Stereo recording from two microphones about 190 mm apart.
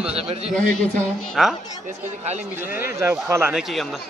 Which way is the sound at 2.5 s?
10° right (ahead or behind).